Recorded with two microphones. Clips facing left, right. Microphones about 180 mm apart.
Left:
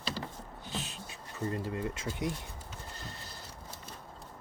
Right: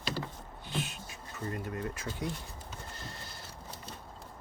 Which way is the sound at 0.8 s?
35° left (ahead or behind).